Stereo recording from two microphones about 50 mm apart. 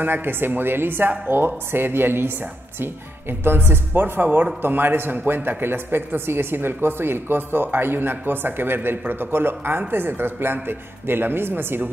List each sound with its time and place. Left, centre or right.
0.0 s a man's voice: right